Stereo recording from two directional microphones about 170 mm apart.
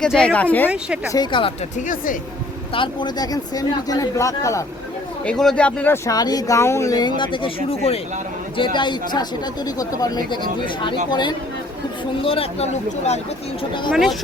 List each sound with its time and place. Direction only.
0.0 s speech: 5° left (ahead or behind)
1.1 s speech: 25° left (ahead or behind)
2.7 s speech: 30° left (ahead or behind)
5.2 s speech: 5° left (ahead or behind); by 13.9 s 30° left (ahead or behind)
13.9 s speech: centre (ahead or behind)